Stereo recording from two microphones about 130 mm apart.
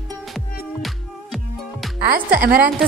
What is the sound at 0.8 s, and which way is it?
Music, centre (ahead or behind).